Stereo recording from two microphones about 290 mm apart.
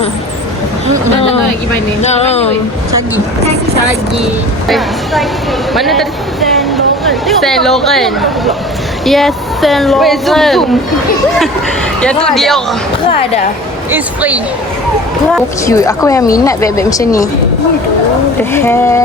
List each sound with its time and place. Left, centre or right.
2.0 s speech: left
5.7 s a woman's voice: centre
11.9 s a woman's voice: centre
13.9 s a woman's voice: centre
15.6 s speech: centre
18.5 s speech: centre